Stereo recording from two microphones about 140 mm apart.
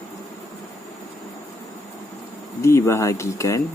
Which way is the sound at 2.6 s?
20° left (ahead or behind).